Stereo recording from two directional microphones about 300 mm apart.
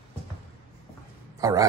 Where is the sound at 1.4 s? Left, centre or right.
Centre.